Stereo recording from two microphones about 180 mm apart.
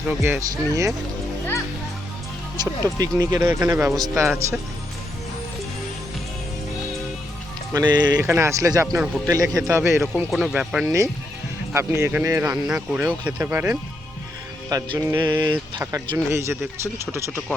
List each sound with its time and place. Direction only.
0.1 s speech: 10° right (ahead or behind)
3.0 s speech: 20° right (ahead or behind)
7.7 s speech: 25° right (ahead or behind)
15.8 s speech: 10° right (ahead or behind)